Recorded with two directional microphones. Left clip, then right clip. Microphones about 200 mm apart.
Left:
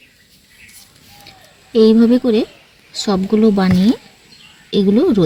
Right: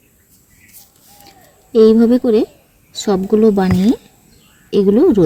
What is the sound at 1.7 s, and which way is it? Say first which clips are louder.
Speech: right 2 dB; 25° right (ahead or behind).